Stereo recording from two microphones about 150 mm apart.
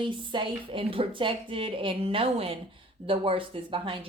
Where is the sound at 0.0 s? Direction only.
35° right (ahead or behind).